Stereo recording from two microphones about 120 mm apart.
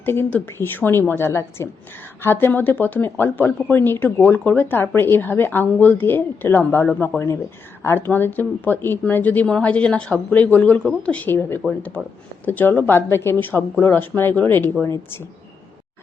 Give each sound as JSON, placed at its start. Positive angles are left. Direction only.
{"t": 0.0, "sound": "speech", "side_deg": 15}